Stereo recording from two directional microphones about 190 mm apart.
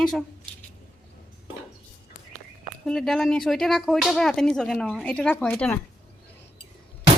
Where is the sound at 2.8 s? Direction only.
5° left (ahead or behind).